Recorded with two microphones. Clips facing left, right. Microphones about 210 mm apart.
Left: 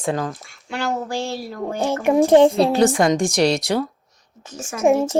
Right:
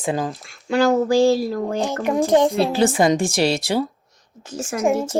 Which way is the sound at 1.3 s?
90° right.